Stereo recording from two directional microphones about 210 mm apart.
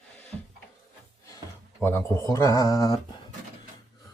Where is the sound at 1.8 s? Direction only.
10° left (ahead or behind).